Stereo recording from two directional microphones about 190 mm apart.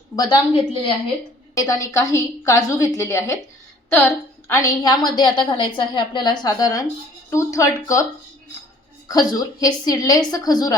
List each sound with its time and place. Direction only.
0.2 s a woman's voice: 25° left (ahead or behind)
1.5 s a woman's voice: 15° left (ahead or behind)
9.0 s a woman's voice: 20° left (ahead or behind)